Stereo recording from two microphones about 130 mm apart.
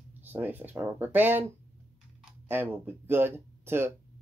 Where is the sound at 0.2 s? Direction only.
15° right (ahead or behind).